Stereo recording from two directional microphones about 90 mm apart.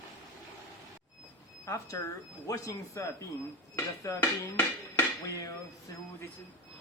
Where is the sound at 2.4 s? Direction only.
40° left (ahead or behind).